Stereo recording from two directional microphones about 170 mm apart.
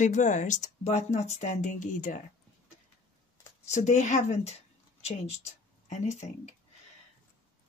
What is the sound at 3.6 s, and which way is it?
Speech, 45° left (ahead or behind).